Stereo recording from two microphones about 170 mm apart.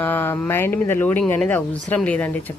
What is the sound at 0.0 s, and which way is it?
A woman's voice, 10° left (ahead or behind).